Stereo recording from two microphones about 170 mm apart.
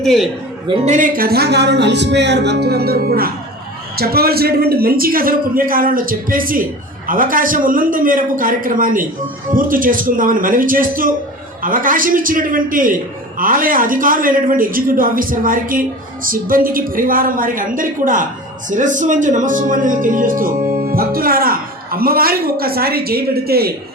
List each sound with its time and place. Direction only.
0.0 s a man's voice: centre (ahead or behind)
0.7 s speech: 35° right (ahead or behind)
0.9 s a man's voice: 55° right (ahead or behind)